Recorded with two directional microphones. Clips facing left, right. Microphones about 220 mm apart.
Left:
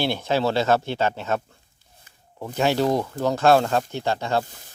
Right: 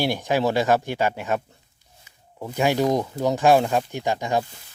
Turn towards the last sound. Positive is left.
turn(degrees=-15)  # may be behind; listen again after turning